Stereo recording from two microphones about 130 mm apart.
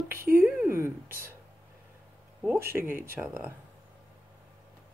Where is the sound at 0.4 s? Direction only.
20° right (ahead or behind).